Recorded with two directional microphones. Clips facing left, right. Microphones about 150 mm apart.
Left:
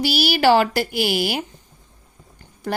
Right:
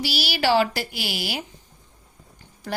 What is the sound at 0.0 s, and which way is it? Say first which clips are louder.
A woman's voice: left 7 dB; 50° left (ahead or behind).